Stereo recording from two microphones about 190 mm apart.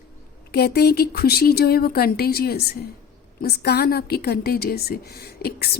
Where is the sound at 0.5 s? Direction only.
55° left (ahead or behind).